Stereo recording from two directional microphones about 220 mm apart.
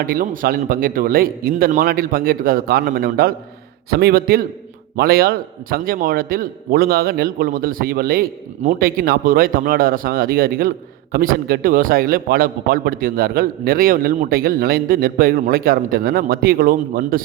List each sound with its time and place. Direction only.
0.0 s a man's voice: 40° right (ahead or behind)